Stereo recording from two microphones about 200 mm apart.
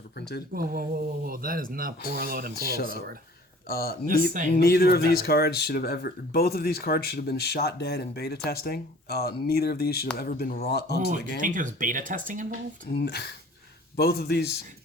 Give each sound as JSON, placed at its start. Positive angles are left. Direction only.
{"t": 0.5, "sound": "speech", "side_deg": -45}
{"t": 2.6, "sound": "speech", "side_deg": 50}
{"t": 11.1, "sound": "speech", "side_deg": -40}
{"t": 12.9, "sound": "speech", "side_deg": 55}